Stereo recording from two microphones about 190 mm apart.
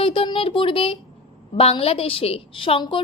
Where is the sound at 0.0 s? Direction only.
25° left (ahead or behind).